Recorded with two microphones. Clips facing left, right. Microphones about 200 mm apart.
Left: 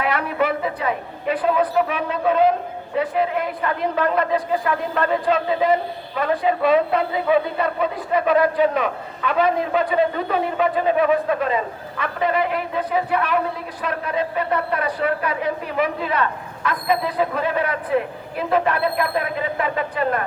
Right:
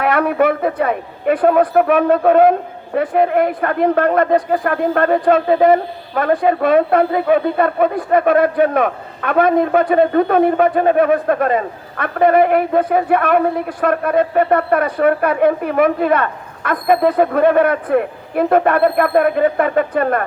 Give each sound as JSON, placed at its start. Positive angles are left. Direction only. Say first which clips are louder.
{"t": 0.0, "sound": "a woman's voice", "louder": "right 7 dB", "side_deg": -55}